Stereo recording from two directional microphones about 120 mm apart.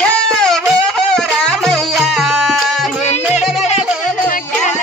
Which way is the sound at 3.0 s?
70° left (ahead or behind).